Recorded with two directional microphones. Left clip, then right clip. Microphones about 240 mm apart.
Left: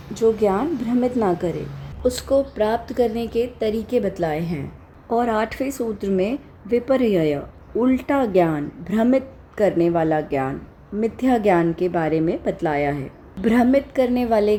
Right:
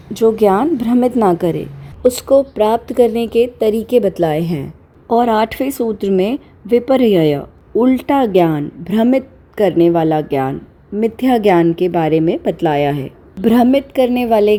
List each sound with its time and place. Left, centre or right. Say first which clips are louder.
0.1 s a woman's voice: right 7 dB; right